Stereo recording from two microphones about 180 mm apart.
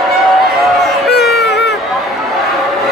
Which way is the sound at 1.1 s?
65° left (ahead or behind).